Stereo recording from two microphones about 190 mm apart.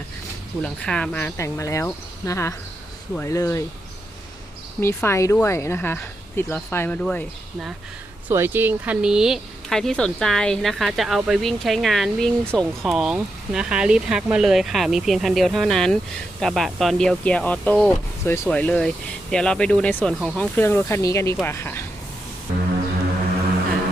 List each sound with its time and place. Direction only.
0.6 s speech: 5° left (ahead or behind)
4.8 s speech: 15° left (ahead or behind)
8.3 s speech: 10° right (ahead or behind); by 21.8 s 15° left (ahead or behind)